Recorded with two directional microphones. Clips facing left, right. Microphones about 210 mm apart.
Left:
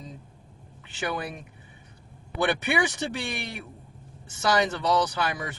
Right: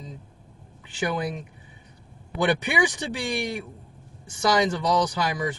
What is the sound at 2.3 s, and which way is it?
Speech, 15° right (ahead or behind).